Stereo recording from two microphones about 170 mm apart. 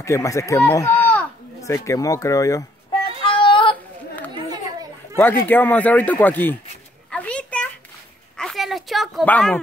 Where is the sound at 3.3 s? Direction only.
30° left (ahead or behind).